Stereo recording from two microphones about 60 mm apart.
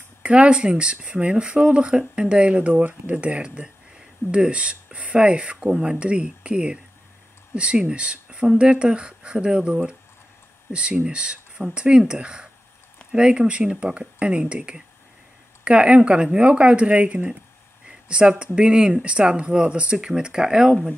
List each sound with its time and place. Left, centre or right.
0.2 s speech: centre